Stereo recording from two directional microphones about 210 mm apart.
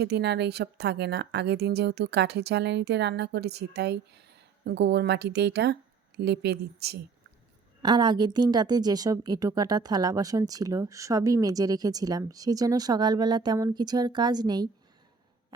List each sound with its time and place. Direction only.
0.0 s speech: 50° right (ahead or behind)
7.8 s a woman's voice: 20° right (ahead or behind)